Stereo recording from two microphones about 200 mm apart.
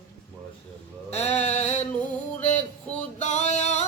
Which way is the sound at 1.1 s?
35° left (ahead or behind).